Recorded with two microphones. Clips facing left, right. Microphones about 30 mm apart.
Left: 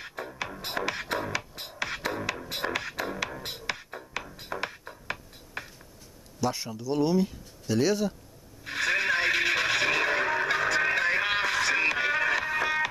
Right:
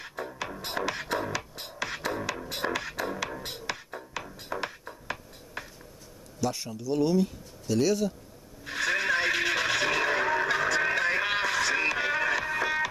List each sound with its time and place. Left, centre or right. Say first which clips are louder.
0.0 s music: even; centre
6.4 s speech: left 1 dB; centre
8.6 s neigh: left 1 dB; centre